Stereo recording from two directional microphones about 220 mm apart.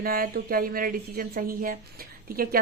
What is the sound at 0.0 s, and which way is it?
A woman's voice, 40° right (ahead or behind).